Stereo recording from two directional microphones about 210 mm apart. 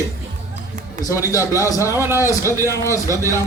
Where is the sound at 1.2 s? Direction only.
15° left (ahead or behind).